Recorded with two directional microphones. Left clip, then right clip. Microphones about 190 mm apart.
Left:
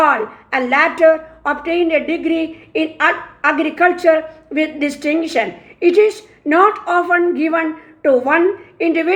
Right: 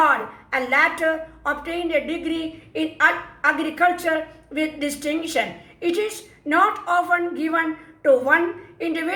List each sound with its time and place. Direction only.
0.0 s a woman's voice: 40° left (ahead or behind)